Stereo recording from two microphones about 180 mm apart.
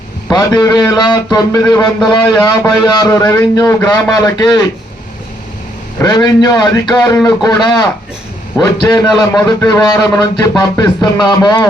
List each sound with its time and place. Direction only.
0.3 s a man's voice: 20° left (ahead or behind)
6.0 s a man's voice: 20° left (ahead or behind)